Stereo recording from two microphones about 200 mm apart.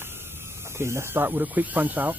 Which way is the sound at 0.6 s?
15° right (ahead or behind).